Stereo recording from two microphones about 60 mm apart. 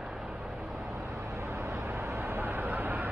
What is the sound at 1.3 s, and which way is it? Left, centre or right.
Vehicle, right.